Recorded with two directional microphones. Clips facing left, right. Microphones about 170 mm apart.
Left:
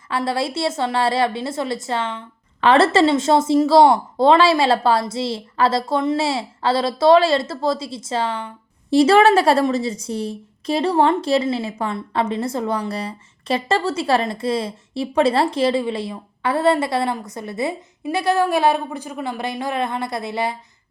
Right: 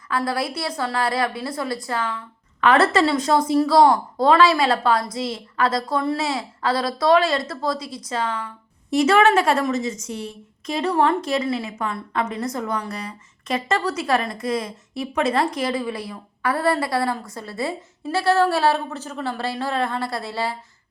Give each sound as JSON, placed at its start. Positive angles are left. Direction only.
{"t": 0.1, "sound": "a woman's voice", "side_deg": 25}